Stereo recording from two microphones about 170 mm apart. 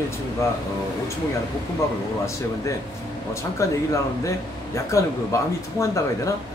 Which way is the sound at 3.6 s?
15° left (ahead or behind).